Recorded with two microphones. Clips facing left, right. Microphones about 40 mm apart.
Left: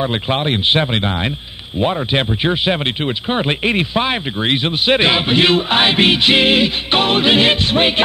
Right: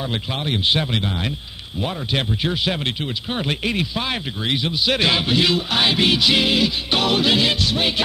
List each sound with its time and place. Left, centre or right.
0.0 s speech: left